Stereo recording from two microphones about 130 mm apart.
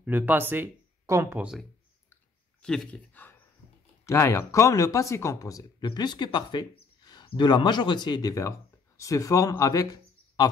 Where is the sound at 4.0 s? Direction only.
25° left (ahead or behind).